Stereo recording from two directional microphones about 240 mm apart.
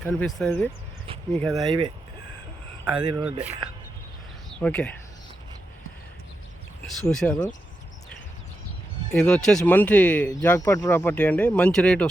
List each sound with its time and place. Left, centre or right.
0.0 s speech: centre
1.5 s speech: centre
3.0 s speech: centre
4.6 s speech: centre
6.8 s speech: centre
9.1 s speech: centre